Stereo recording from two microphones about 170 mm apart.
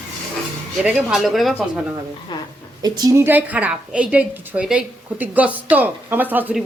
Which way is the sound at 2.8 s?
25° right (ahead or behind).